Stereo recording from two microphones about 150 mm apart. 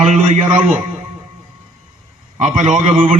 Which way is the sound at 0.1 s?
50° right (ahead or behind).